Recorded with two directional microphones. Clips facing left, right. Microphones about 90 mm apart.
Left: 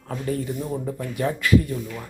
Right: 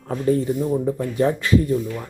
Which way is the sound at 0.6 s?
15° right (ahead or behind).